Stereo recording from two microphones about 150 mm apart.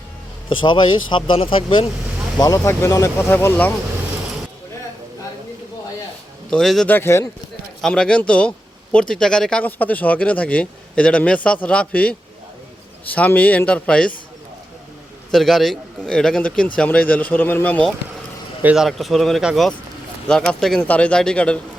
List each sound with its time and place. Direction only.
0.4 s speech: 35° left (ahead or behind)
2.4 s a man's voice: 20° left (ahead or behind)
6.5 s speech: centre (ahead or behind)
6.9 s a man's voice: 15° left (ahead or behind)
7.8 s a man's voice: 5° left (ahead or behind)
15.3 s a man's voice: centre (ahead or behind)
18.6 s a man's voice: 5° right (ahead or behind)